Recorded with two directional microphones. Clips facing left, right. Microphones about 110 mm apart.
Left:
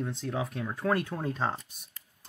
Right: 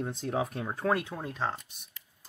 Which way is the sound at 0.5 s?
25° right (ahead or behind).